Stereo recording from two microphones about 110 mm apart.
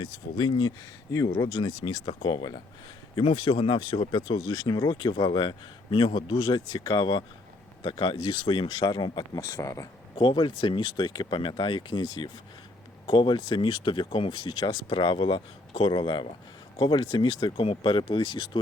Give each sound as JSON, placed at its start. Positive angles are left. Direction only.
{"t": 0.0, "sound": "speech", "side_deg": 45}
{"t": 1.1, "sound": "speech", "side_deg": 30}
{"t": 1.5, "sound": "speech", "side_deg": 45}
{"t": 9.4, "sound": "speech", "side_deg": 30}
{"t": 10.2, "sound": "speech", "side_deg": 50}